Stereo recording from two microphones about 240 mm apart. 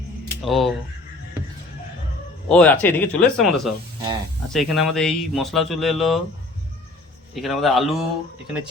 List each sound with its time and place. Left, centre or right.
0.4 s speech: centre
2.5 s speech: centre
7.3 s speech: centre